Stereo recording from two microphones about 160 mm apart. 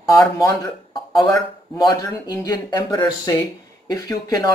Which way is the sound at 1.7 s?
20° left (ahead or behind).